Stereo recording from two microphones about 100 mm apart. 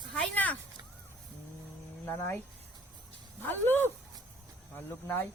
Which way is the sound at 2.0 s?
25° left (ahead or behind).